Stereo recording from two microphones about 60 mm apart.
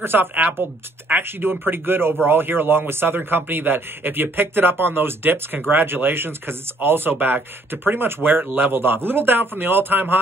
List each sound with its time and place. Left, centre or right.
0.0 s speech: right